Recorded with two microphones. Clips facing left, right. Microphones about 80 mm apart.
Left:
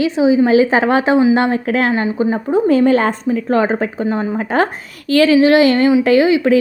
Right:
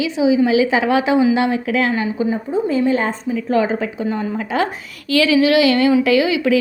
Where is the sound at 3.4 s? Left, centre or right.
Left.